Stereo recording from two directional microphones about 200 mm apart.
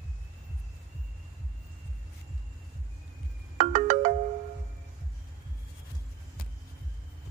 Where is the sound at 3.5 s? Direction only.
35° right (ahead or behind).